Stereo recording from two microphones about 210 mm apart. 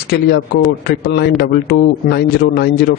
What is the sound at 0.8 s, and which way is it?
A man's voice, 55° left (ahead or behind).